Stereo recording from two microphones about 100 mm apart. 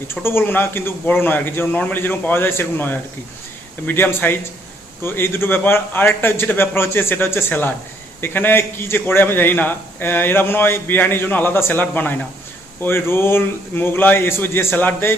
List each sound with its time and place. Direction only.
0.1 s a man's voice: 25° left (ahead or behind)